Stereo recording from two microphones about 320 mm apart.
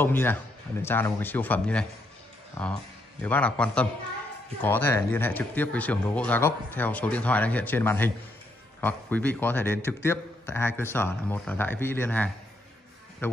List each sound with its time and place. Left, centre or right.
0.0 s a man's voice: centre